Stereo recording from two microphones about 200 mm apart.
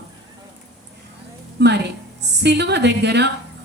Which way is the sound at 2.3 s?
60° right (ahead or behind).